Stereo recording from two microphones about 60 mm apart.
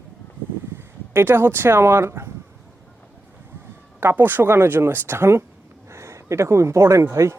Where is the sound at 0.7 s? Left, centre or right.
Right.